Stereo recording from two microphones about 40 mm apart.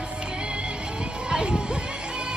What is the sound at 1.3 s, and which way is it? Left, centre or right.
Music, right.